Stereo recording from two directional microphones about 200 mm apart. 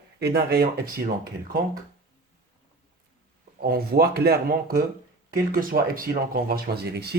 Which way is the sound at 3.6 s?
50° right (ahead or behind).